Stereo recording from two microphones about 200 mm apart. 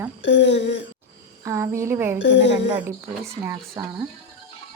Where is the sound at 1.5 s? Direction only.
15° right (ahead or behind).